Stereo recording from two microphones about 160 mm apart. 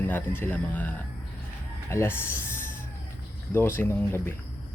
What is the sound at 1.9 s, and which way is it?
Speech, 15° left (ahead or behind).